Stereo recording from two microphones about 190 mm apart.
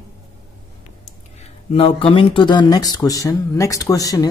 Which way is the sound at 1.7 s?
30° left (ahead or behind).